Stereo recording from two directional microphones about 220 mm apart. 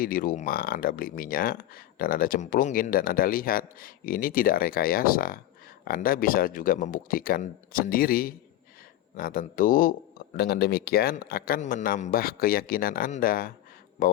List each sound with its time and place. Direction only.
0.0 s speech: 40° left (ahead or behind)